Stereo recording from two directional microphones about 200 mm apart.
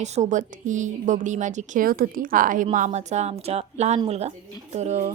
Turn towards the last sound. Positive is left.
turn(degrees=-35)  # may be behind; listen again after turning